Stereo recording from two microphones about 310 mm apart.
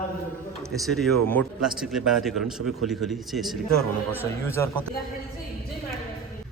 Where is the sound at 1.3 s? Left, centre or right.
Centre.